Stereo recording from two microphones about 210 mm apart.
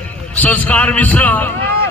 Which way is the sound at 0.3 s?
5° left (ahead or behind).